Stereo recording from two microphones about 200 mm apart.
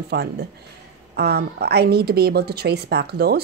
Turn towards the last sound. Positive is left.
turn(degrees=-55)  # may be behind; listen again after turning